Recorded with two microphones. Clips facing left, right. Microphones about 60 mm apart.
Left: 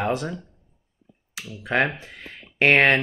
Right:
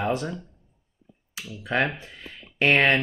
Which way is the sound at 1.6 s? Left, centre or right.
Left.